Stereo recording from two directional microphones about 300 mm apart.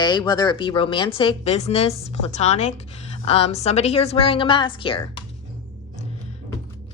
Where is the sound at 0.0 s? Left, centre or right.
Centre.